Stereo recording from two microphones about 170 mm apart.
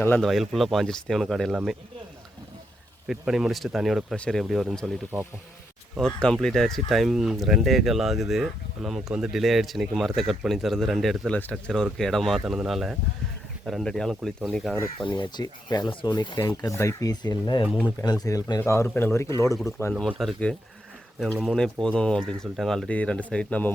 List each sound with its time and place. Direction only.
0.0 s a man's voice: 10° left (ahead or behind)
0.3 s speech: centre (ahead or behind)
3.1 s speech: 5° right (ahead or behind)
6.0 s speech: 5° left (ahead or behind)
14.9 s a man's voice: 30° left (ahead or behind)
19.9 s speech: centre (ahead or behind)